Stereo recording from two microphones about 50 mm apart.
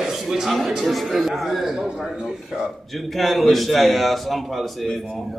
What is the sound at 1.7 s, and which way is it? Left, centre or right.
Speech, centre.